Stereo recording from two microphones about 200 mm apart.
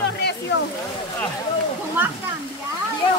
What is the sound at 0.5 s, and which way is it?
Speech, 60° left (ahead or behind).